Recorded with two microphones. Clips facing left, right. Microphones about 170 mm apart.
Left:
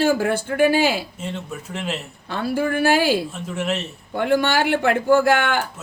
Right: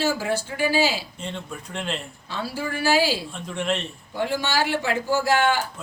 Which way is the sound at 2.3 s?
55° left (ahead or behind).